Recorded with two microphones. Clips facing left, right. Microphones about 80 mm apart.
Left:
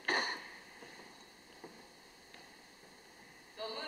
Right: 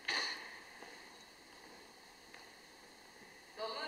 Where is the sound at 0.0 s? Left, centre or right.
Left.